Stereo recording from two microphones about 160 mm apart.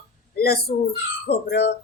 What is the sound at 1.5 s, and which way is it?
Speech, 90° left.